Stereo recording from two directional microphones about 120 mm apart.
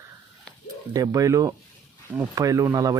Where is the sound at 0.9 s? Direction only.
30° right (ahead or behind).